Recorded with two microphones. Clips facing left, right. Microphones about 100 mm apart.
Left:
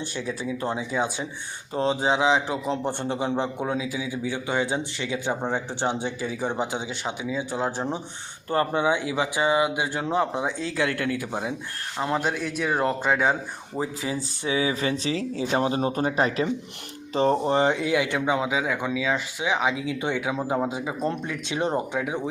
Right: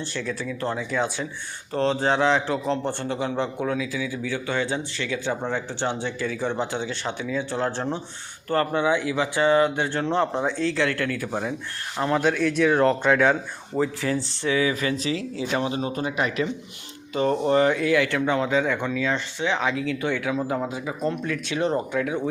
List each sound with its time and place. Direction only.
0.0 s a man's voice: 15° left (ahead or behind)
10.8 s speech: 20° left (ahead or behind); by 13.3 s 5° left (ahead or behind)
13.7 s a man's voice: 20° left (ahead or behind)